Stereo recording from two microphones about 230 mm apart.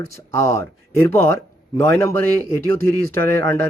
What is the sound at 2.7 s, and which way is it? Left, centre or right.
Speech, right.